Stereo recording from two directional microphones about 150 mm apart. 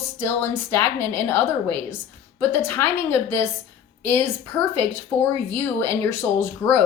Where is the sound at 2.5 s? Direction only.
15° left (ahead or behind).